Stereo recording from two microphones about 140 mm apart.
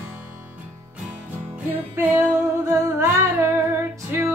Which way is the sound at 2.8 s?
20° right (ahead or behind).